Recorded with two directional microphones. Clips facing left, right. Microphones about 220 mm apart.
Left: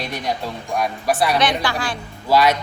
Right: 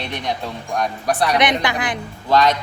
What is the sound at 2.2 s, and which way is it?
Speech, 10° left (ahead or behind).